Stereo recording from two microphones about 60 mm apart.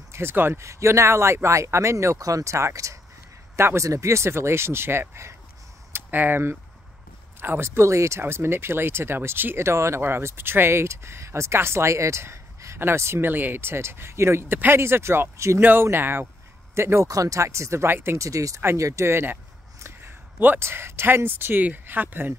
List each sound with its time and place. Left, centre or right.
0.1 s speech: right
0.6 s speech: right
2.1 s speech: right
6.0 s speech: right
13.3 s speech: right
15.6 s speech: right
17.1 s speech: right
17.8 s speech: right
18.1 s speech: right
20.5 s speech: right